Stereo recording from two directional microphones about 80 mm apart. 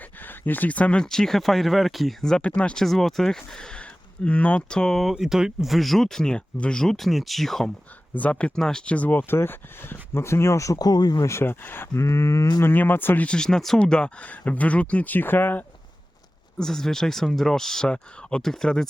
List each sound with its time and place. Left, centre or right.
0.0 s speech: left; by 5.1 s centre
5.1 s speech: centre
8.1 s speech: centre; by 11.3 s left
11.3 s speech: left
11.9 s a sound: left
12.6 s speech: left
13.2 s speech: centre; by 15.6 s left
16.6 s speech: centre